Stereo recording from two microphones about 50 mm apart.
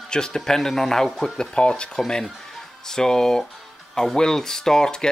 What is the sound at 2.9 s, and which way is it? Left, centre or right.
Speech, centre.